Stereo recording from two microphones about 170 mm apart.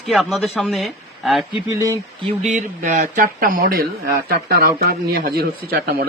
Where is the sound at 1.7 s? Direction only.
20° right (ahead or behind).